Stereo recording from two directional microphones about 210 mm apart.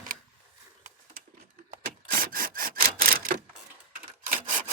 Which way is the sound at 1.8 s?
45° right (ahead or behind).